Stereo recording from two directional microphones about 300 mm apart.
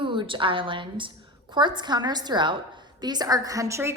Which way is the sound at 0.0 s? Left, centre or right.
Centre.